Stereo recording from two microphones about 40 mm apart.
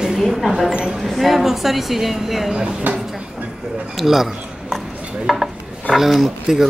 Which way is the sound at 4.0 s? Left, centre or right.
Centre.